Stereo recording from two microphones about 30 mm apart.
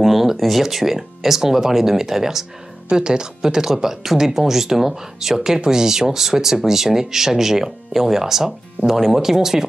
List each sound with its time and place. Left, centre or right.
0.0 s speech: centre
2.9 s speech: right